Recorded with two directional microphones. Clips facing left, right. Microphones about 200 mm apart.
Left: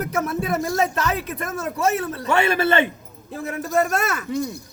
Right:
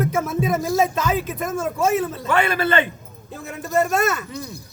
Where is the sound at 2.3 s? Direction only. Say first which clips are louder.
Left 1 dB; 25° left (ahead or behind).